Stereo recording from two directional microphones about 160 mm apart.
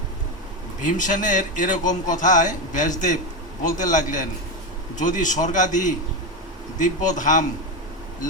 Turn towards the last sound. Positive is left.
turn(degrees=55)  # may be behind; listen again after turning